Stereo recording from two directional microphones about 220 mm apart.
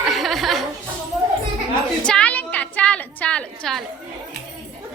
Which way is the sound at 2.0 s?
5° left (ahead or behind).